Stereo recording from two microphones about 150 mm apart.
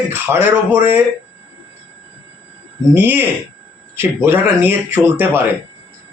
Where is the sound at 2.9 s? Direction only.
15° right (ahead or behind).